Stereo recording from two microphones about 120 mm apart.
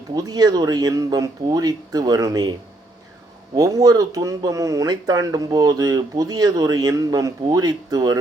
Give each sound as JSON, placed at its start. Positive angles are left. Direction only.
{"t": 0.1, "sound": "speech", "side_deg": -35}